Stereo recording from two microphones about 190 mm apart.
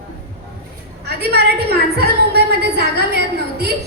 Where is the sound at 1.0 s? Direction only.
60° right (ahead or behind).